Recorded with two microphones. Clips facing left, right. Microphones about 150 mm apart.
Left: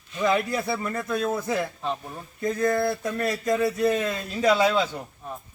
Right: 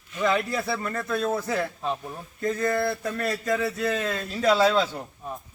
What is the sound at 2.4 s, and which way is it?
Speech, 15° left (ahead or behind).